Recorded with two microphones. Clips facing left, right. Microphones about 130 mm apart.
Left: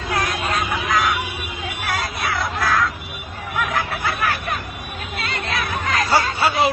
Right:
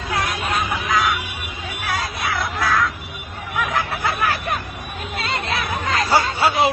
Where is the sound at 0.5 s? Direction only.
25° right (ahead or behind).